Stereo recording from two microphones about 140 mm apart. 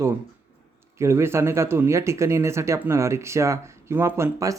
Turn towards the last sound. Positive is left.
turn(degrees=-15)  # may be behind; listen again after turning